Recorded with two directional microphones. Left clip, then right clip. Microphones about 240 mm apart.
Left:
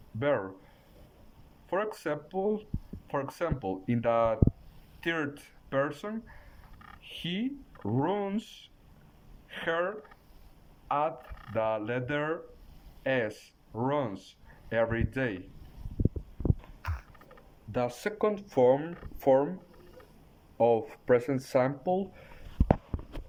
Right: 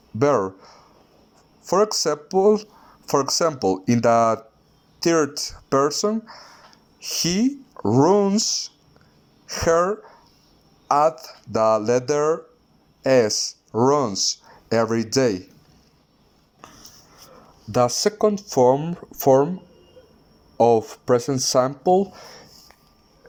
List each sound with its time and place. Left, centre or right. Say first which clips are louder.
0.2 s speech: right 10 dB; centre
1.7 s speech: right 12 dB; centre
17.7 s speech: right 12 dB; right
20.6 s speech: right 9 dB; centre